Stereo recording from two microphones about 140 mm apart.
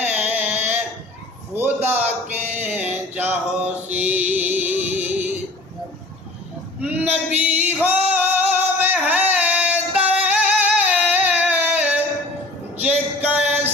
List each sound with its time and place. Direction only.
0.0 s a sound: 10° right (ahead or behind)
2.7 s mantra: 15° right (ahead or behind)
6.8 s female singing: 10° right (ahead or behind)